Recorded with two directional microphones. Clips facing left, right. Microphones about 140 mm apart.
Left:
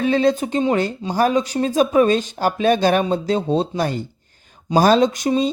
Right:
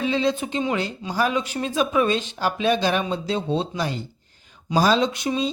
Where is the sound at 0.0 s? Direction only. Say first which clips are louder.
Left 5 dB; 50° left (ahead or behind).